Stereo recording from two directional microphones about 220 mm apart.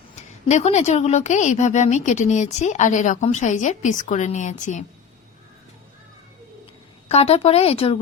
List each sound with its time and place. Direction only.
0.2 s speech: 30° left (ahead or behind)
7.1 s speech: 25° left (ahead or behind)